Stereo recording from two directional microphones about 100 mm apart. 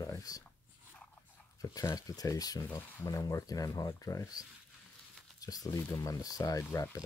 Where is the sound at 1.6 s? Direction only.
35° left (ahead or behind).